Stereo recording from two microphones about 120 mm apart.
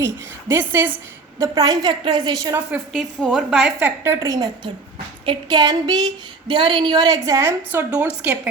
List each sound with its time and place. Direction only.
0.0 s a woman's voice: 20° right (ahead or behind)
1.4 s a woman's voice: 30° right (ahead or behind)
2.7 s a woman's voice: 5° right (ahead or behind)
3.2 s a woman's voice: 10° left (ahead or behind)
3.5 s a woman's voice: 5° right (ahead or behind)
4.0 s a woman's voice: 25° right (ahead or behind)
7.3 s a woman's voice: 25° right (ahead or behind)